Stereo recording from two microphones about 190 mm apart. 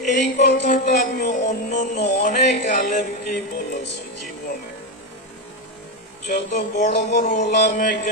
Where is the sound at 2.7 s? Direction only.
40° left (ahead or behind).